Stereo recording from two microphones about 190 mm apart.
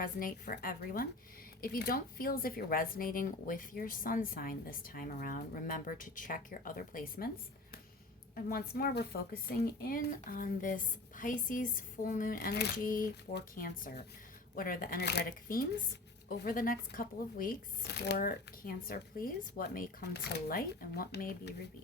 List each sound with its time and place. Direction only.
0.0 s speech: 50° left (ahead or behind)
8.4 s speech: 55° left (ahead or behind)